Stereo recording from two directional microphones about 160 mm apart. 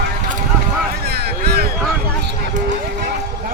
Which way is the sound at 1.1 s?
80° right.